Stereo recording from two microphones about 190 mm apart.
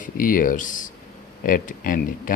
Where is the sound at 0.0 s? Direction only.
45° left (ahead or behind).